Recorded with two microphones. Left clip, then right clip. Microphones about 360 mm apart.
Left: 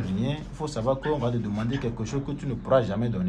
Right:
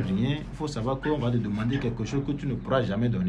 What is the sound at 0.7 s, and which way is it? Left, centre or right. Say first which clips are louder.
Speech: left 3 dB; centre.